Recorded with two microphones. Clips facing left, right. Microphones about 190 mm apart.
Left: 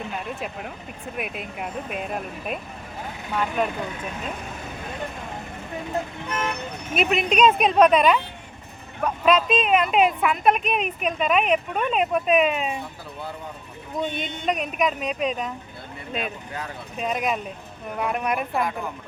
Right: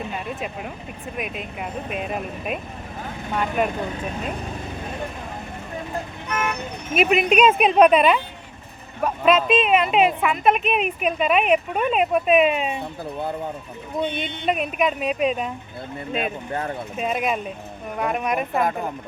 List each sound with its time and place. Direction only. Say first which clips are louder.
0.1 s speech: right 2 dB; centre (ahead or behind)
6.2 s speech: right 2 dB; 30° left (ahead or behind)
6.9 s a woman's voice: right 4 dB; 5° right (ahead or behind)
14.0 s speech: right 2 dB; 45° left (ahead or behind)
14.4 s speech: right 2 dB; 5° right (ahead or behind)
16.1 s speech: right 4 dB; 50° right (ahead or behind)
17.0 s speech: right 1 dB; 5° right (ahead or behind)